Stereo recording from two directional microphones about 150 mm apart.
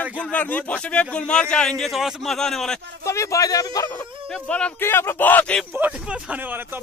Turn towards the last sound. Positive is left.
turn(degrees=-15)  # may be behind; listen again after turning